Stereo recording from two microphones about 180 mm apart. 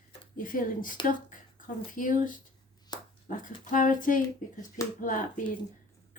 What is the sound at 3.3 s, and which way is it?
A woman's voice, 45° left (ahead or behind).